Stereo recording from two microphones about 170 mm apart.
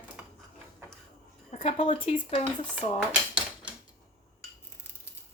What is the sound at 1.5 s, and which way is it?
Speech, 40° left (ahead or behind).